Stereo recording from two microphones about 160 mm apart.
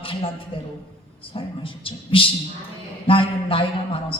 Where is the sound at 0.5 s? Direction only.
35° left (ahead or behind).